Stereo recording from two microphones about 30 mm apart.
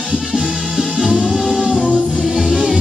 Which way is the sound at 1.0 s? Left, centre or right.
Centre.